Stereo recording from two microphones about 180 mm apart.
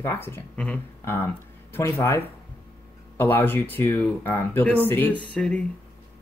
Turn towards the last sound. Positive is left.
turn(degrees=5)  # may be behind; listen again after turning